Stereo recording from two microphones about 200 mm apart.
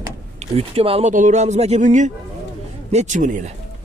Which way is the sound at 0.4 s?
30° right (ahead or behind).